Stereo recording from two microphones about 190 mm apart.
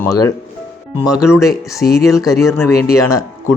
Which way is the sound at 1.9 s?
15° left (ahead or behind).